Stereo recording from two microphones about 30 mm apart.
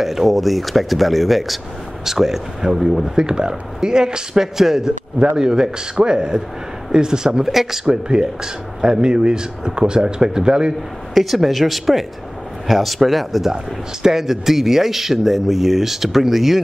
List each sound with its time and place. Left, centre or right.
0.0 s speech: centre
2.0 s speech: centre
7.4 s speech: centre
7.8 s speech: right
11.1 s speech: centre
14.0 s speech: centre